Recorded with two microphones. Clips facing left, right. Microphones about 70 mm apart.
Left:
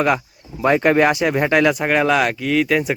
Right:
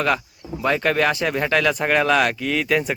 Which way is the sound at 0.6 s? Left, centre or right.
Centre.